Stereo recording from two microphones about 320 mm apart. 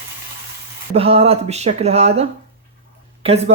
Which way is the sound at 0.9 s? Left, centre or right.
Centre.